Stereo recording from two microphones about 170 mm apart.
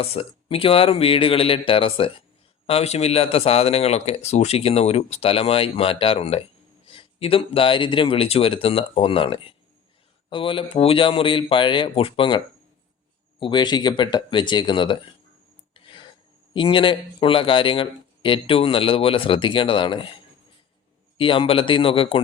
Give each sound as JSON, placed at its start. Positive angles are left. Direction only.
{"t": 0.0, "sound": "speech", "side_deg": 35}
{"t": 13.4, "sound": "speech", "side_deg": 25}
{"t": 15.7, "sound": "a sound", "side_deg": 30}
{"t": 16.6, "sound": "speech", "side_deg": 30}
{"t": 21.2, "sound": "speech", "side_deg": 30}